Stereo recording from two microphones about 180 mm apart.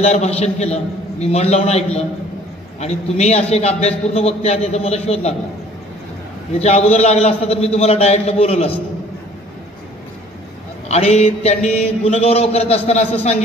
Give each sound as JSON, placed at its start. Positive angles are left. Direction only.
{"t": 0.0, "sound": "a man's voice", "side_deg": 35}
{"t": 6.6, "sound": "a man's voice", "side_deg": 35}
{"t": 10.9, "sound": "a man's voice", "side_deg": 35}